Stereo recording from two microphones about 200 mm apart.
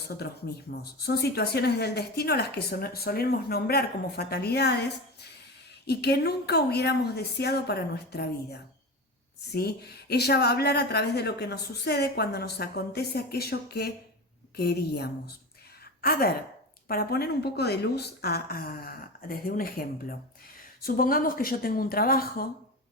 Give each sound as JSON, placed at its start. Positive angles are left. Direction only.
{"t": 0.7, "sound": "a woman's voice", "side_deg": 50}